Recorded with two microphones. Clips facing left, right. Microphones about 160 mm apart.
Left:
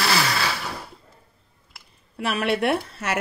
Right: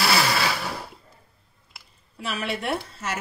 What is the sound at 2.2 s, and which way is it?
Speech, 65° left (ahead or behind).